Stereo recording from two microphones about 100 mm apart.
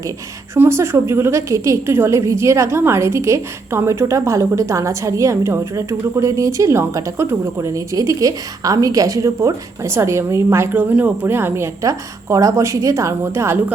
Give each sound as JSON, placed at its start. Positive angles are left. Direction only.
{"t": 0.5, "sound": "a woman's voice", "side_deg": -25}